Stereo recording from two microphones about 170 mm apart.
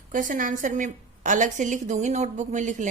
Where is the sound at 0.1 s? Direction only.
50° right (ahead or behind).